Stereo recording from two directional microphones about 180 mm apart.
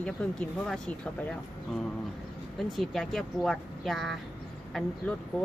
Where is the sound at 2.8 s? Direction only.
Centre (ahead or behind).